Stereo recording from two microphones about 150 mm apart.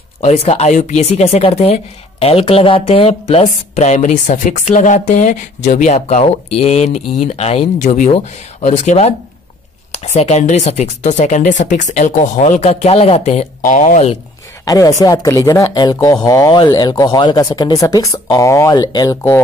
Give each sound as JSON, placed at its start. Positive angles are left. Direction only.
{"t": 0.2, "sound": "speech", "side_deg": 45}
{"t": 13.7, "sound": "speech", "side_deg": 55}
{"t": 14.6, "sound": "speech", "side_deg": 25}